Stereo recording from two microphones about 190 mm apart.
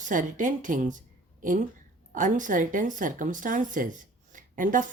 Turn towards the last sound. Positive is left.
turn(degrees=-45)  # may be behind; listen again after turning